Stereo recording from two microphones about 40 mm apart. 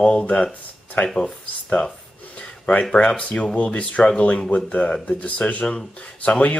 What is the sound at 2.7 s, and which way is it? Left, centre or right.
Speech, left.